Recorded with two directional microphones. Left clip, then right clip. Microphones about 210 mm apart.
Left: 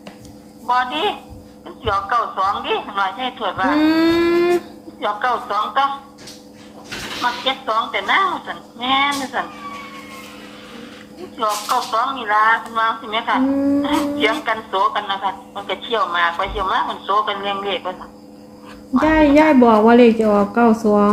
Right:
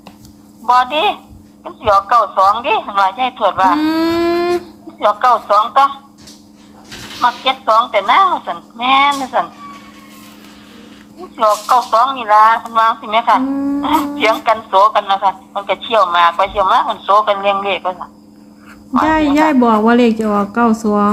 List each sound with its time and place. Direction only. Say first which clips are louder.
0.7 s a man's voice: right 6 dB; 50° right (ahead or behind)
3.8 s a sound: even; 15° right (ahead or behind)
4.9 s a man's voice: right 8 dB; 50° right (ahead or behind)
7.2 s a man's voice: right 6 dB; 50° right (ahead or behind)
11.3 s a man's voice: right 8 dB; 50° right (ahead or behind)
19.0 s a woman's voice: even; 15° right (ahead or behind)